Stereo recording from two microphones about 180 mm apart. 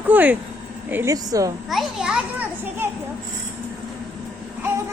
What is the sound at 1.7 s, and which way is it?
Children playing, centre (ahead or behind).